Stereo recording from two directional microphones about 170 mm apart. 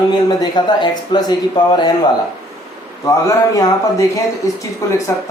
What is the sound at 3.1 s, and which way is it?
A man's voice, 20° left (ahead or behind).